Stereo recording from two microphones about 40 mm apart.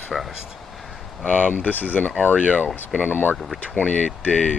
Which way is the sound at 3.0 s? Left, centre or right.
Left.